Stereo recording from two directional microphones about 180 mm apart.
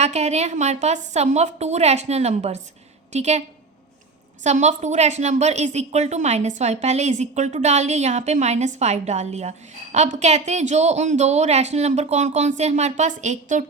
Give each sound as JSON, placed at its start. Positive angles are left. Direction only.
{"t": 0.0, "sound": "a woman's voice", "side_deg": -40}
{"t": 4.4, "sound": "a woman's voice", "side_deg": -40}